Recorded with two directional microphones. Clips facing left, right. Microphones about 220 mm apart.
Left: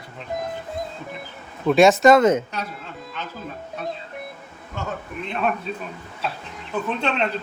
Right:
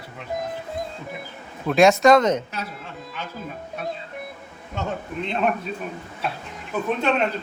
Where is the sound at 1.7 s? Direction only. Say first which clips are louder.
Left 1 dB; centre (ahead or behind).